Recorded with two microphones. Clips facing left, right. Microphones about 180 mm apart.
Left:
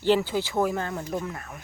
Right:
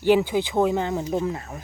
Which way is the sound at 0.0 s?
15° right (ahead or behind).